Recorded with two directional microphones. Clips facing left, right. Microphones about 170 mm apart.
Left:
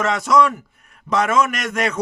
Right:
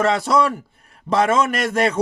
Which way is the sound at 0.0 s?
30° right (ahead or behind).